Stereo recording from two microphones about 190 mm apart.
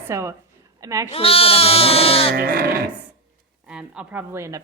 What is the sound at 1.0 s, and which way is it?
Speech, 30° left (ahead or behind).